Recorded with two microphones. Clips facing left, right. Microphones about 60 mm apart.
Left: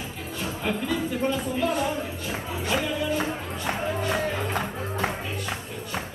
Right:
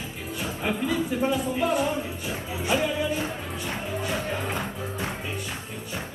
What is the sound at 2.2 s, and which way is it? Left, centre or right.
Music, centre.